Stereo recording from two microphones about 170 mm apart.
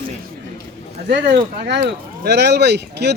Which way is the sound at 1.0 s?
80° right.